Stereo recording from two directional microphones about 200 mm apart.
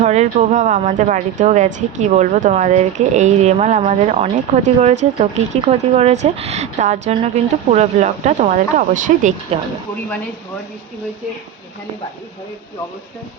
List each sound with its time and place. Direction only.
0.0 s speech: 35° right (ahead or behind)